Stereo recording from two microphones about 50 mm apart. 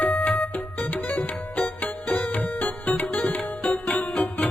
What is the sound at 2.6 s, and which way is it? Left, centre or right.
Music, left.